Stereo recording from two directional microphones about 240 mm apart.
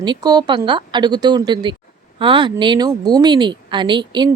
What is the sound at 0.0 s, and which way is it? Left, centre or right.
Speech, centre.